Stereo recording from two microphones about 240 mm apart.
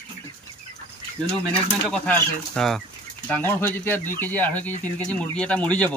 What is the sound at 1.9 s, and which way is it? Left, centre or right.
Speech, centre.